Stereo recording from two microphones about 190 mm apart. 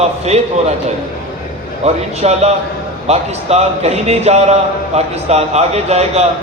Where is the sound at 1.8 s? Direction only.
35° right (ahead or behind).